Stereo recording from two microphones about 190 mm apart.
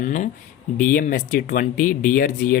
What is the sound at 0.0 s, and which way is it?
Speech, 40° left (ahead or behind).